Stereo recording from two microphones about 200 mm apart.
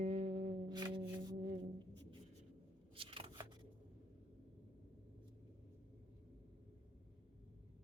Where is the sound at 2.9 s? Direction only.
25° right (ahead or behind).